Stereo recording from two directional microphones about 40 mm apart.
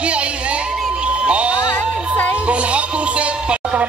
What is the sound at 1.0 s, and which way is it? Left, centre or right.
Music, right.